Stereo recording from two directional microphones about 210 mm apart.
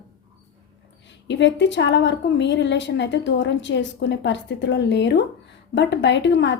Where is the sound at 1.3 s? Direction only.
55° left (ahead or behind).